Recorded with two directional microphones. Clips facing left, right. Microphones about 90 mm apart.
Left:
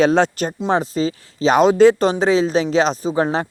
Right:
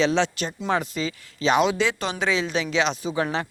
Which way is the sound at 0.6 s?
30° left (ahead or behind).